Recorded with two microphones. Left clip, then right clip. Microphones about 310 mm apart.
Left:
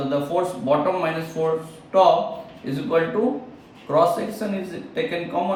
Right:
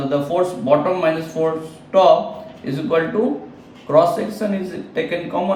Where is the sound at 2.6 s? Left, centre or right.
Centre.